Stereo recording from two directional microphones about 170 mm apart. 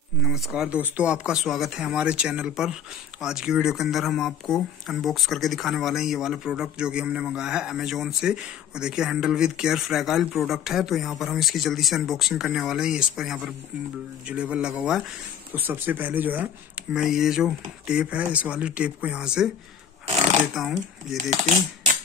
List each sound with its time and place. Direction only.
0.3 s speech: 5° right (ahead or behind)
20.5 s speech: centre (ahead or behind)
21.2 s speech: 45° right (ahead or behind)